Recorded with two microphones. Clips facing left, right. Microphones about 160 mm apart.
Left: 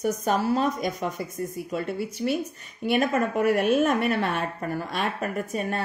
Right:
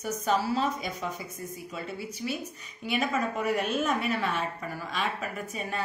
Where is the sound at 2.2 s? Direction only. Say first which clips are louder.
Left 8 dB; 45° left (ahead or behind).